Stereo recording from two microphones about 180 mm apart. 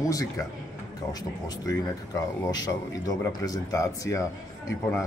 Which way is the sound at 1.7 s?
20° left (ahead or behind).